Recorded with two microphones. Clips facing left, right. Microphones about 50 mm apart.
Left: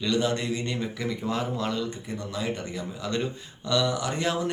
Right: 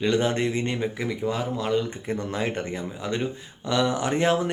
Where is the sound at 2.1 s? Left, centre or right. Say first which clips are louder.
Right 4 dB; right.